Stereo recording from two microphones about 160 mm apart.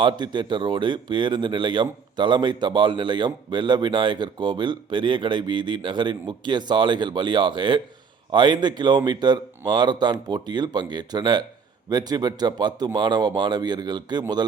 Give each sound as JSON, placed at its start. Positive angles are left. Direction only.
{"t": 0.0, "sound": "speech", "side_deg": -30}